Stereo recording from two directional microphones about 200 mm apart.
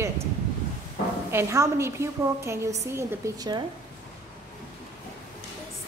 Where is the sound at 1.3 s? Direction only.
15° right (ahead or behind).